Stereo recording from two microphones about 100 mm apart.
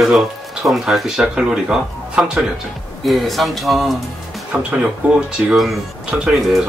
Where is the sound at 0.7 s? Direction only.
Centre (ahead or behind).